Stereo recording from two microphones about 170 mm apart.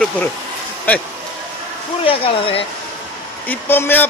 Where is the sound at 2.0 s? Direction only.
30° left (ahead or behind).